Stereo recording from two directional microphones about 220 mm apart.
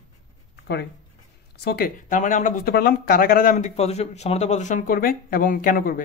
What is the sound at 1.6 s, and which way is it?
Speech, 45° left (ahead or behind).